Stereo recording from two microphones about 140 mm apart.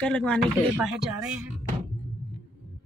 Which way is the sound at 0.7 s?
5° right (ahead or behind).